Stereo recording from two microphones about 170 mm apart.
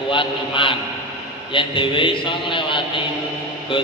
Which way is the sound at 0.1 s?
30° left (ahead or behind).